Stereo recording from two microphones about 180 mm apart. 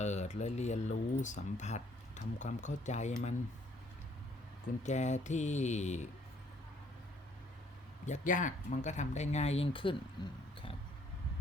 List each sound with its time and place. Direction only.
0.0 s speech: 40° left (ahead or behind)
4.8 s speech: 40° left (ahead or behind)
8.0 s speech: 45° left (ahead or behind)